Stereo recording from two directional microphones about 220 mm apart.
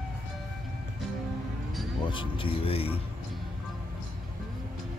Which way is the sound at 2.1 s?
25° left (ahead or behind).